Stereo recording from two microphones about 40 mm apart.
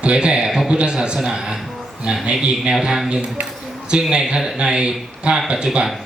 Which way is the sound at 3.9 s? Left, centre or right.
Right.